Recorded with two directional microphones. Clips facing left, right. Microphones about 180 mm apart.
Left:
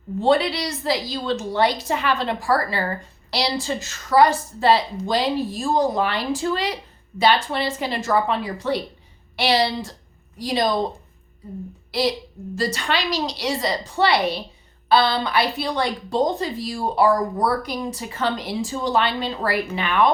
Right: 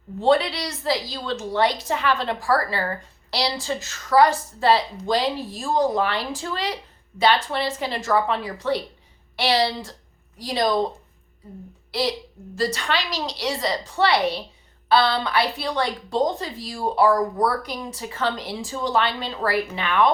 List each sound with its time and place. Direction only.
0.2 s a woman's voice: 10° left (ahead or behind)
11.9 s a woman's voice: 15° left (ahead or behind)